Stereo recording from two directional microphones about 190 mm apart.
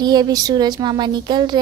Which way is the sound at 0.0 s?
20° right (ahead or behind).